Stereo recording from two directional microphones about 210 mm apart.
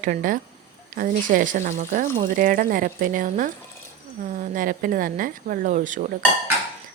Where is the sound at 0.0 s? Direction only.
40° right (ahead or behind).